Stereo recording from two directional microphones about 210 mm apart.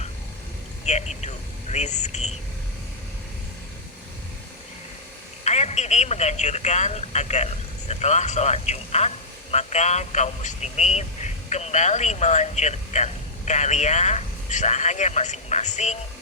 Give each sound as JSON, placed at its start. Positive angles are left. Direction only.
{"t": 0.9, "sound": "speech", "side_deg": 30}
{"t": 5.5, "sound": "speech", "side_deg": 30}